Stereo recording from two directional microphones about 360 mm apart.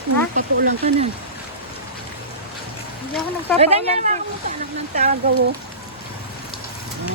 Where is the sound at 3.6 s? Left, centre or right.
Centre.